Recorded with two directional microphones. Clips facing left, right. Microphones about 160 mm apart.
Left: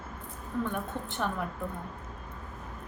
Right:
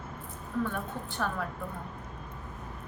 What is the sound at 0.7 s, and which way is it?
Speech, 20° left (ahead or behind).